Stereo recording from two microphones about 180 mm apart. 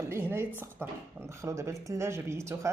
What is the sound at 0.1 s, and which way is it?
Speech, 10° right (ahead or behind).